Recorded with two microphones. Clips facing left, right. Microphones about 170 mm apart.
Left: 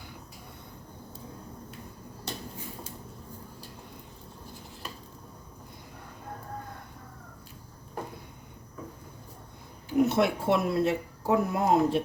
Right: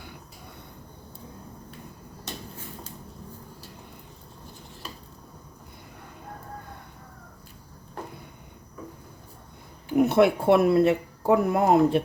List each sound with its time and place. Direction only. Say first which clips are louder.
10.0 s speech: right 5 dB; 60° right (ahead or behind)